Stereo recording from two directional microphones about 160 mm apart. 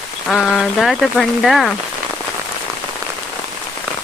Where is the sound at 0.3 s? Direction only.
Centre (ahead or behind).